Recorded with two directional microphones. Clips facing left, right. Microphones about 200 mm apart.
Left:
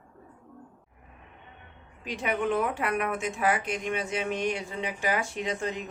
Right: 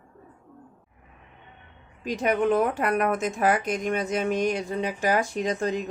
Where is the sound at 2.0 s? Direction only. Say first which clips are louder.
Right 6 dB; 40° right (ahead or behind).